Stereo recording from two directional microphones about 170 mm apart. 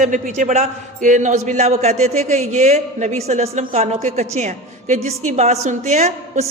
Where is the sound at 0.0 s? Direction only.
50° right (ahead or behind).